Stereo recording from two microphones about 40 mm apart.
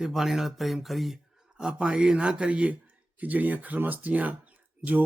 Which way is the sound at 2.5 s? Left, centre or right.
Right.